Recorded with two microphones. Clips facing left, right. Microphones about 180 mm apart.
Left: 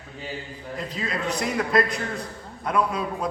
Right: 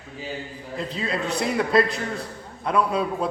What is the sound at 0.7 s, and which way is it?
A man's voice, 30° right (ahead or behind).